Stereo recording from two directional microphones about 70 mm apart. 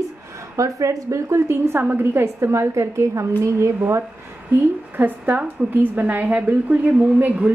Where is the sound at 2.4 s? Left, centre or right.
Right.